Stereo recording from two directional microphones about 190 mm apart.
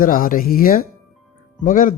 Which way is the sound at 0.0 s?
50° left (ahead or behind).